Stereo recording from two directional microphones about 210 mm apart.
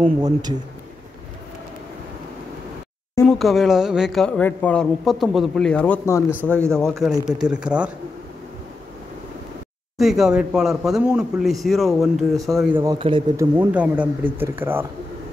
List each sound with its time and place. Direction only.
0.0 s speech: 20° right (ahead or behind)
3.3 s a woman's voice: centre (ahead or behind)
6.5 s speech: 10° right (ahead or behind)
6.8 s a woman's voice: centre (ahead or behind)
9.9 s a woman's voice: centre (ahead or behind)
12.8 s speech: 20° right (ahead or behind)
13.6 s speech: 10° right (ahead or behind)